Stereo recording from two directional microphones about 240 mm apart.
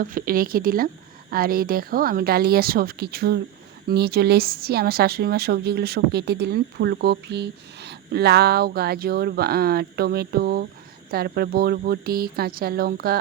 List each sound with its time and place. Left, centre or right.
0.0 s a woman's voice: right